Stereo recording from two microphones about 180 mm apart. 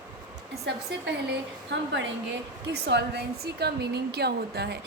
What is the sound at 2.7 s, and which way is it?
A woman's voice, 70° right (ahead or behind).